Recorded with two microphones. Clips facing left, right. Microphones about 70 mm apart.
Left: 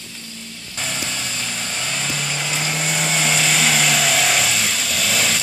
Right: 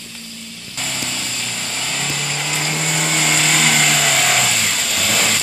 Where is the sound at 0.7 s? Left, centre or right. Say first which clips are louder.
Right 1 dB; centre.